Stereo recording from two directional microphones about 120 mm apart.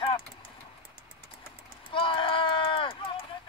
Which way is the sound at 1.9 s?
45° left (ahead or behind).